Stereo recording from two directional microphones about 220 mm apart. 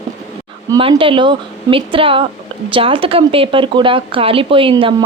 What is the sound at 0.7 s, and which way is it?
Speech, 20° right (ahead or behind).